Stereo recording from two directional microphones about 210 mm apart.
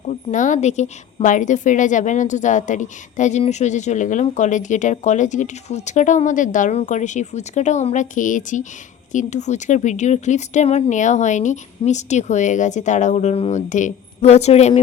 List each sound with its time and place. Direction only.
0.1 s a woman's voice: 35° left (ahead or behind)